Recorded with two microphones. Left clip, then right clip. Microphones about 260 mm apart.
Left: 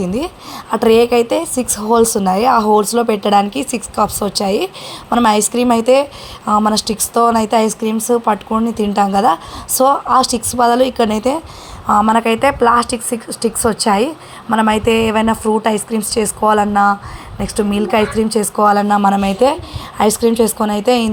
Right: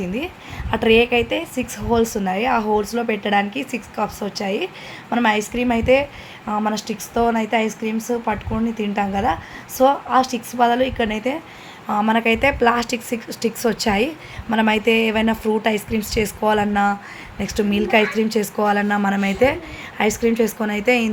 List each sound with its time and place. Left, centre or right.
0.0 s a woman's voice: left
12.0 s a woman's voice: centre